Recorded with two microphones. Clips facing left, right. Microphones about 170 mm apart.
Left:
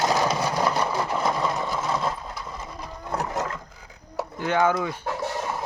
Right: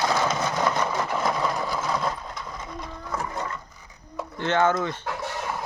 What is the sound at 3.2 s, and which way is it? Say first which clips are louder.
Roaring cats: left 3 dB; 90° left.